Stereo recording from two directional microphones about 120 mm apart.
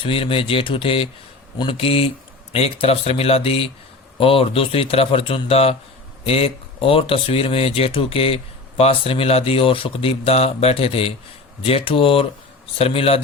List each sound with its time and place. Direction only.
0.0 s speech: 50° left (ahead or behind)